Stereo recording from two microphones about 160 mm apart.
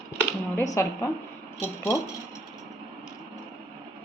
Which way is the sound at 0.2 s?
15° left (ahead or behind).